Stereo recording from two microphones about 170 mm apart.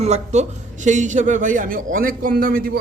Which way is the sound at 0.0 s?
40° right (ahead or behind).